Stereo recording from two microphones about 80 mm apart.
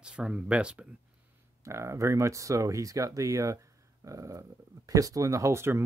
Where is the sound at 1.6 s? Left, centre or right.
Right.